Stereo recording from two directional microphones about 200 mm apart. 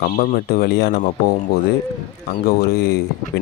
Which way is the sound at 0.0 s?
45° left (ahead or behind).